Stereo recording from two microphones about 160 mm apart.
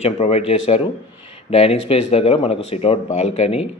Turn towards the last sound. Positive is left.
turn(degrees=40)  # may be behind; listen again after turning